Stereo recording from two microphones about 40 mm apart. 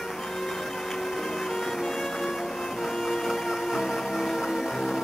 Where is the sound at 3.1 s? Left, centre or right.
Centre.